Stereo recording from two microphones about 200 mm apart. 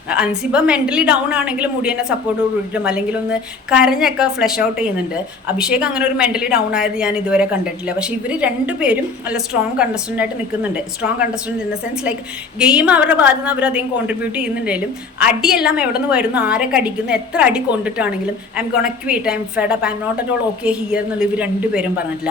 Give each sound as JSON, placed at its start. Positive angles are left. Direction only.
{"t": 0.1, "sound": "speech", "side_deg": -5}
{"t": 12.5, "sound": "a woman's voice", "side_deg": -5}